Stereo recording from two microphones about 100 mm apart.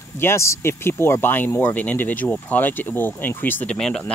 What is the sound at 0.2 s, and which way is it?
Speech, 25° left (ahead or behind).